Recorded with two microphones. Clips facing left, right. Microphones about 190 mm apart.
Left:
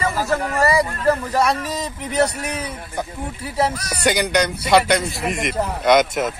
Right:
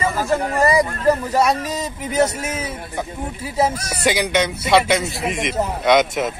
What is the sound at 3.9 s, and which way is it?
A man's voice, centre (ahead or behind).